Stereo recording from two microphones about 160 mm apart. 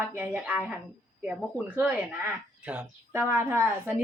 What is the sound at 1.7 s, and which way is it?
Speech, 10° right (ahead or behind).